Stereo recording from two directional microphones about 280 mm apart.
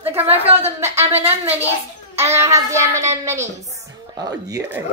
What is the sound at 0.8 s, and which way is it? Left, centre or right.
Speech, centre.